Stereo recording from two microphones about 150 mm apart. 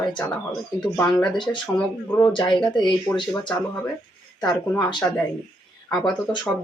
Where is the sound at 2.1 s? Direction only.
25° left (ahead or behind).